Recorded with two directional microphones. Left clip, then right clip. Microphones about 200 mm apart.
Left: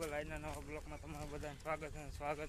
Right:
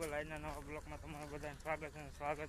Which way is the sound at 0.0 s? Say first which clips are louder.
Even; 15° left (ahead or behind).